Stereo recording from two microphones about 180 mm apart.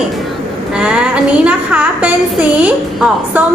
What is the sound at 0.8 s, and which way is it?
A woman's voice, 5° right (ahead or behind).